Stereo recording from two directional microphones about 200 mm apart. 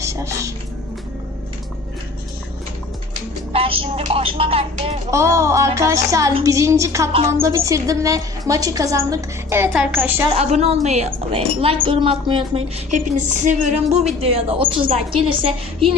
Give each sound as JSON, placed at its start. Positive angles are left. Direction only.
{"t": 0.0, "sound": "a sound", "side_deg": -15}
{"t": 3.5, "sound": "speech", "side_deg": -30}
{"t": 5.1, "sound": "a woman's voice", "side_deg": -15}
{"t": 10.3, "sound": "a woman's voice", "side_deg": -30}
{"t": 13.1, "sound": "a woman's voice", "side_deg": -40}